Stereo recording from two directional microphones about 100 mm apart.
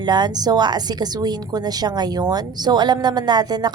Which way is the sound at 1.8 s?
40° right (ahead or behind).